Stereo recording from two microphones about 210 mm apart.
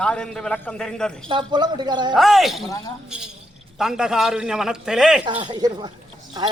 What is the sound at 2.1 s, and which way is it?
Speech, centre (ahead or behind).